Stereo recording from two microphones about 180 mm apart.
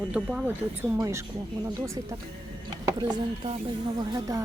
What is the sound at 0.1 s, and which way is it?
Speech, 10° right (ahead or behind).